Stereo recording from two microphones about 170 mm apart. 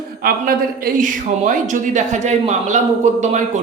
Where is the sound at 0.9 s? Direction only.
50° right (ahead or behind).